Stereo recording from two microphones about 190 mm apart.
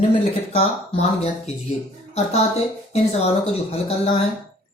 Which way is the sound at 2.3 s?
35° left (ahead or behind).